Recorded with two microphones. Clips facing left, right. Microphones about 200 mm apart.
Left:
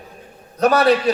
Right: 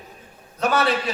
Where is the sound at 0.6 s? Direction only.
35° left (ahead or behind).